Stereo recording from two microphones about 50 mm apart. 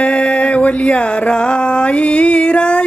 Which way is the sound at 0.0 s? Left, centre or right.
Left.